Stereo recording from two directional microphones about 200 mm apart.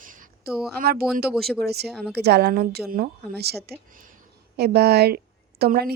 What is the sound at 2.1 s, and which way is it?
A woman's voice, 55° right (ahead or behind).